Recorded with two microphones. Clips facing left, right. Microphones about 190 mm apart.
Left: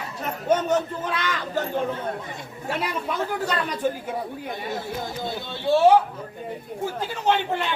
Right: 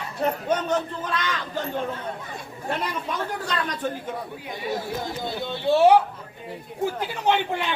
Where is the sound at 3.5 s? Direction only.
10° left (ahead or behind).